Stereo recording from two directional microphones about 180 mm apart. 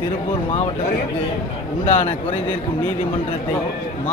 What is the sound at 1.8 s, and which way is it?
Speech, 40° left (ahead or behind).